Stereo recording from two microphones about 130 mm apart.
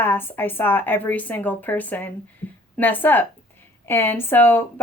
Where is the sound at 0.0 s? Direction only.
15° left (ahead or behind).